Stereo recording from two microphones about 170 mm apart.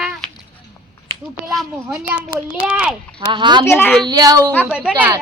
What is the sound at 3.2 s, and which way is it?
Speech, 25° right (ahead or behind).